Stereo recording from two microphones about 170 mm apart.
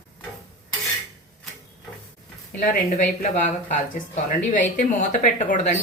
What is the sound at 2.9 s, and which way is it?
A woman's voice, 50° left (ahead or behind).